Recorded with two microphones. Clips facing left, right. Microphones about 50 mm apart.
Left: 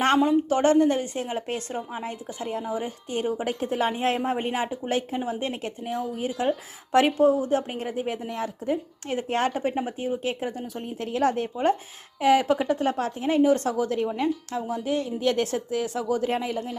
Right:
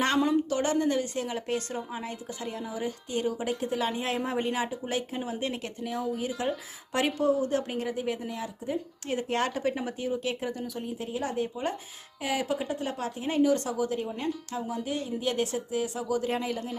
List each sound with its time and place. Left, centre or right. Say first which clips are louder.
0.4 s a woman's voice: left 7 dB; left
10.8 s a woman's voice: left 6 dB; left
13.7 s a woman's voice: left 5 dB; left